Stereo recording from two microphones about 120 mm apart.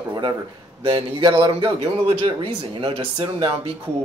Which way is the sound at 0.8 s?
45° right (ahead or behind).